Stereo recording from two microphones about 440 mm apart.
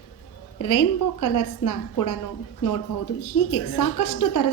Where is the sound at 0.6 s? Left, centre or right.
Left.